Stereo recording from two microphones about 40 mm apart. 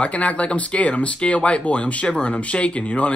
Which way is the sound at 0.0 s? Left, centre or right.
Left.